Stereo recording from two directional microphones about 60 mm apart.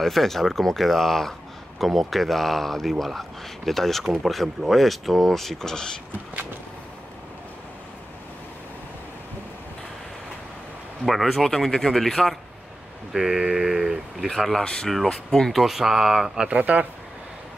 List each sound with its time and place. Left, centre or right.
0.0 s speech: centre
11.1 s speech: centre
13.1 s a sound: centre
14.2 s speech: centre
16.4 s speech: right